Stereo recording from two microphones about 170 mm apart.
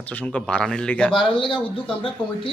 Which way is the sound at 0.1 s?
10° left (ahead or behind).